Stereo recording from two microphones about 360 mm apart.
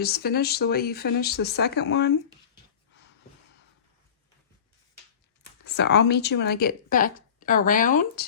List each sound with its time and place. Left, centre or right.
0.0 s speech: left
5.6 s speech: left